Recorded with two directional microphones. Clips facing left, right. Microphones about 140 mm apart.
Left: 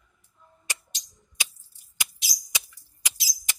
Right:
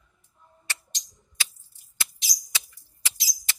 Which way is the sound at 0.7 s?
15° left (ahead or behind).